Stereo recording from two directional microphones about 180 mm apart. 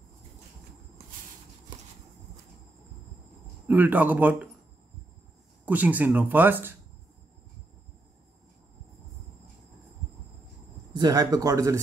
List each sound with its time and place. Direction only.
3.6 s speech: 10° right (ahead or behind)
5.7 s speech: 10° right (ahead or behind)
10.9 s speech: 20° right (ahead or behind)